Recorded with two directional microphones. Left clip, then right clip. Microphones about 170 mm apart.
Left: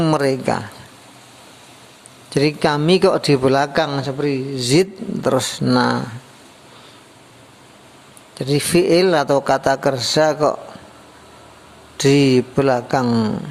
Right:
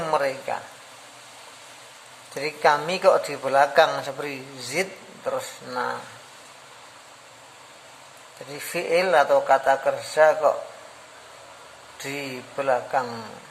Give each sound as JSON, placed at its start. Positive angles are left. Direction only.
{"t": 0.0, "sound": "speech", "side_deg": 45}
{"t": 2.3, "sound": "speech", "side_deg": 35}
{"t": 3.8, "sound": "a man's voice", "side_deg": 20}
{"t": 4.5, "sound": "speech", "side_deg": 40}
{"t": 8.4, "sound": "speech", "side_deg": 35}
{"t": 12.0, "sound": "speech", "side_deg": 40}